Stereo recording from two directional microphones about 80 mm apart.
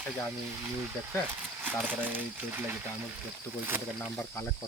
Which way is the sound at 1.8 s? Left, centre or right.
Right.